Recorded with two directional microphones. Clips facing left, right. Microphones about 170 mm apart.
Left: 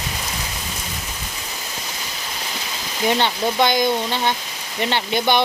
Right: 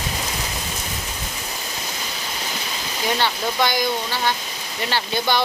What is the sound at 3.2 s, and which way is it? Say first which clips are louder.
Speech: even; 20° left (ahead or behind).